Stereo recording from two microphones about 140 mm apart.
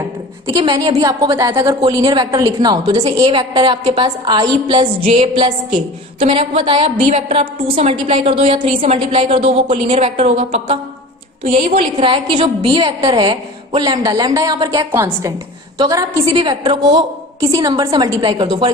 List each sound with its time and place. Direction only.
0.6 s a woman's voice: 30° right (ahead or behind)